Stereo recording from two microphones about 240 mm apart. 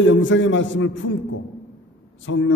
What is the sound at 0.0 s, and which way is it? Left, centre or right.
A man's voice, left.